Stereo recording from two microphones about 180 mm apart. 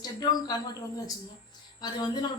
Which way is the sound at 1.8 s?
25° left (ahead or behind).